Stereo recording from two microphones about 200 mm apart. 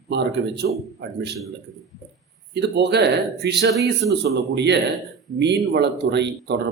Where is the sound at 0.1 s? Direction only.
60° right (ahead or behind).